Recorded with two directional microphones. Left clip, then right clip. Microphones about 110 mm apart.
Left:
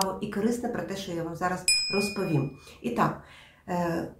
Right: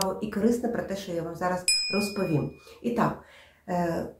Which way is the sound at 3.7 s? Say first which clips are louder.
Right 1 dB; 15° left (ahead or behind).